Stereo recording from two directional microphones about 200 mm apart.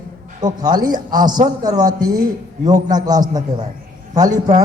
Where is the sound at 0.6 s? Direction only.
20° right (ahead or behind).